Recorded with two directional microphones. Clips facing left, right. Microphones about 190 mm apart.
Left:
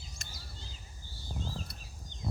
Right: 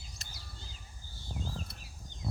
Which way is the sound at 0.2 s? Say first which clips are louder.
Left 3 dB; 35° right (ahead or behind).